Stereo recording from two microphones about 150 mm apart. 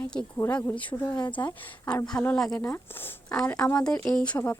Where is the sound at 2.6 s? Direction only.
15° left (ahead or behind).